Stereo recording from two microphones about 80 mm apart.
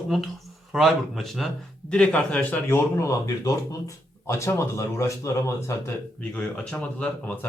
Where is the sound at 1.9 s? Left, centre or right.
Centre.